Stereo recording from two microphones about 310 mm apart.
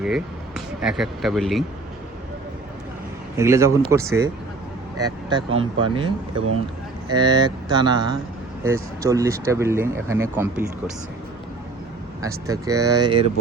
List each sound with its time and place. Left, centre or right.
0.0 s speech: centre
3.3 s speech: centre
12.2 s speech: centre